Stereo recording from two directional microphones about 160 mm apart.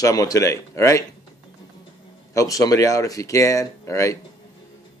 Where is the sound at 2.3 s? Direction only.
20° left (ahead or behind).